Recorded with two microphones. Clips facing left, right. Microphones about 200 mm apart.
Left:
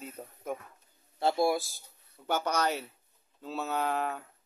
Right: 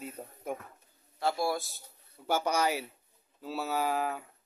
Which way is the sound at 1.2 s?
20° left (ahead or behind).